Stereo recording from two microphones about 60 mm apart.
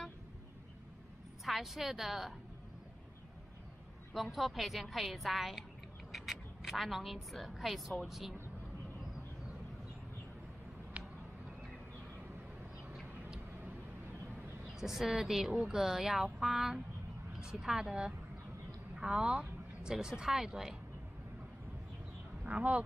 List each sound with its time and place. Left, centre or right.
1.4 s a woman's voice: centre
4.1 s a woman's voice: centre
14.7 s a woman's voice: centre
22.4 s speech: centre